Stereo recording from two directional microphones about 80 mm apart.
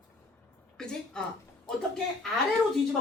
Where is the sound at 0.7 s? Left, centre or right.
Centre.